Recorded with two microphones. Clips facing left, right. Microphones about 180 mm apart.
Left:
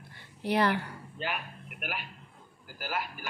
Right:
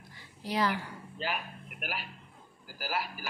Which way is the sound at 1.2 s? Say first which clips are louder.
Even; 35° right (ahead or behind).